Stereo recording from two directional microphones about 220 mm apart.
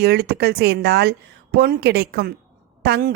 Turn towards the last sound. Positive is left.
turn(degrees=-45)  # may be behind; listen again after turning